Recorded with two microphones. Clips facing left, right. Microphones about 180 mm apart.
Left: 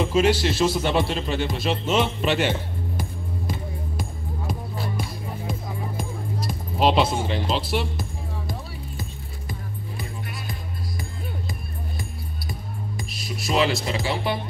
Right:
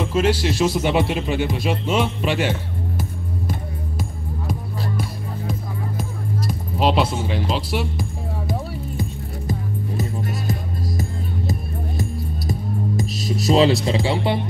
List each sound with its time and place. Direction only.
0.0 s speech: 5° right (ahead or behind)
6.4 s music: 5° right (ahead or behind)
7.2 s speech: 5° right (ahead or behind)
12.0 s music: 40° right (ahead or behind)